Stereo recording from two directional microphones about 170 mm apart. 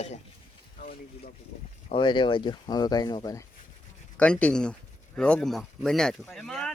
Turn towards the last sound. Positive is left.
turn(degrees=5)  # may be behind; listen again after turning